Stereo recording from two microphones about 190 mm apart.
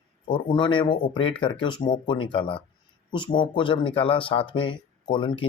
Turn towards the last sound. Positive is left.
turn(degrees=25)  # may be behind; listen again after turning